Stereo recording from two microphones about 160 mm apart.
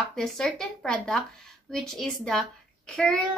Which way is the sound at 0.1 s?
5° left (ahead or behind).